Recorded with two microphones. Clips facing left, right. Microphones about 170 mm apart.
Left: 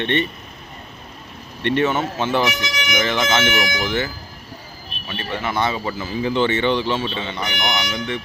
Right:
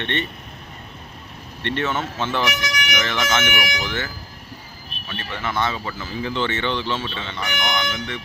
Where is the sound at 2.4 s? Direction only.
25° left (ahead or behind).